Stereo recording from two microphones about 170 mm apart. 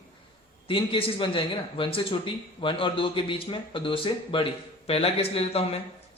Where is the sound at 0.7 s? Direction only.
30° left (ahead or behind).